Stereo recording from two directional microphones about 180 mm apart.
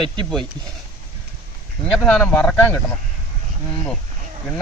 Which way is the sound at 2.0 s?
5° left (ahead or behind).